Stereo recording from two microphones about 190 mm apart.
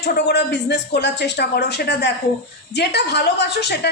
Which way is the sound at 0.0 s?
60° left (ahead or behind).